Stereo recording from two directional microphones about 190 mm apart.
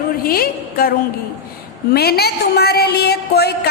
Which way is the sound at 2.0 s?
55° left (ahead or behind).